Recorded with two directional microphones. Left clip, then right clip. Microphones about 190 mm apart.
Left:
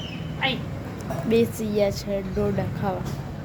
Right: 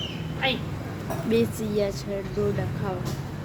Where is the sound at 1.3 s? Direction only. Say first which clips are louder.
Left 3 dB; 20° left (ahead or behind).